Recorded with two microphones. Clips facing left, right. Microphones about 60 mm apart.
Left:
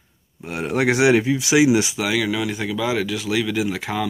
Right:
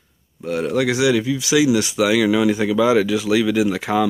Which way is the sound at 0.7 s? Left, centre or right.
Left.